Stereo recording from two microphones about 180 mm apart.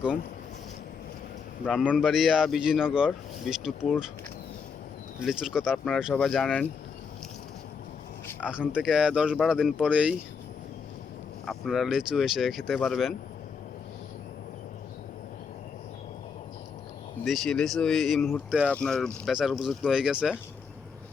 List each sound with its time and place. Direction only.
1.7 s a man's voice: 5° right (ahead or behind)
5.2 s a man's voice: 5° right (ahead or behind)
8.4 s a man's voice: 5° right (ahead or behind)
11.4 s a man's voice: centre (ahead or behind)
17.2 s a man's voice: centre (ahead or behind)